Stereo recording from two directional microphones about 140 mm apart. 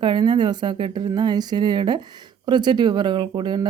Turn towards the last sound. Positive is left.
turn(degrees=-30)  # may be behind; listen again after turning